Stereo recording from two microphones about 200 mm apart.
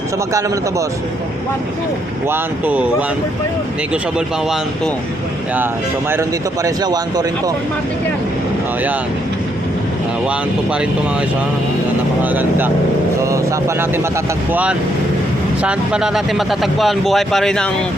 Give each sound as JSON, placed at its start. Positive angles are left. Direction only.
{"t": 2.2, "sound": "speech", "side_deg": -10}
{"t": 6.1, "sound": "speech", "side_deg": -15}
{"t": 10.2, "sound": "speech", "side_deg": -5}
{"t": 12.2, "sound": "speech", "side_deg": -10}